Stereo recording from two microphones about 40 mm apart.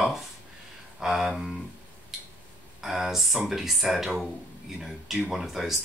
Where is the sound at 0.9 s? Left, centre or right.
Centre.